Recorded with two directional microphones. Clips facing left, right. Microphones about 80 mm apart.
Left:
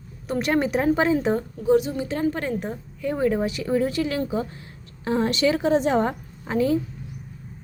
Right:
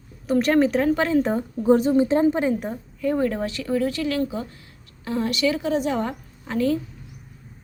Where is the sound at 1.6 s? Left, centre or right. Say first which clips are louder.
Right 4 dB; right; by 2.5 s centre.